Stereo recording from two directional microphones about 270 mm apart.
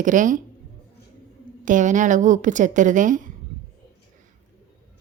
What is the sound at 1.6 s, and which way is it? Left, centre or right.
A woman's voice, right.